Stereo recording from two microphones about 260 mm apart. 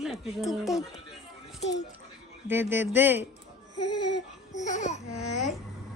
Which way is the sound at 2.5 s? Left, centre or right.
Centre.